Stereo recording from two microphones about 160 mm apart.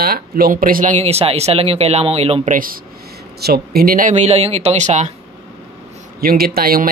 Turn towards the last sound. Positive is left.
turn(degrees=-70)  # may be behind; listen again after turning